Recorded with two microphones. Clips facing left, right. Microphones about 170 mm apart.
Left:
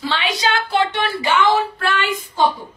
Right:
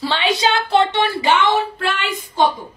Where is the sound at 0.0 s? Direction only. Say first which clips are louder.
Right 3 dB; 30° right (ahead or behind).